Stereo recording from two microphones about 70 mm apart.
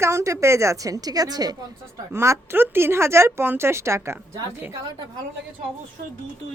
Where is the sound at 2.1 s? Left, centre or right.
Right.